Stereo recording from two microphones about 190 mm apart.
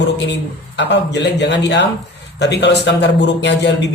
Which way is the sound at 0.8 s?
65° left (ahead or behind).